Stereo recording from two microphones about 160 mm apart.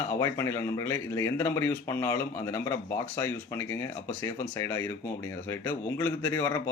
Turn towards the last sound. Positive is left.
turn(degrees=15)  # may be behind; listen again after turning